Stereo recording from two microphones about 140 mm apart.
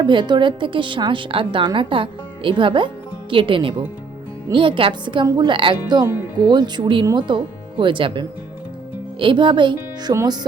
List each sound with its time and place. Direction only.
0.0 s a woman's voice: 35° right (ahead or behind)